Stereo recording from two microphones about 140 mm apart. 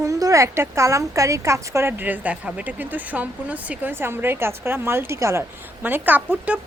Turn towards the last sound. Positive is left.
turn(degrees=-15)  # may be behind; listen again after turning